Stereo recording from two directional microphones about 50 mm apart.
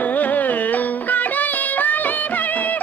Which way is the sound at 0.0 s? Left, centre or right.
Left.